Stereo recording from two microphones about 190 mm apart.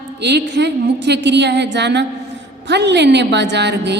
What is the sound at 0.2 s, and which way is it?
A woman's voice, 60° right (ahead or behind).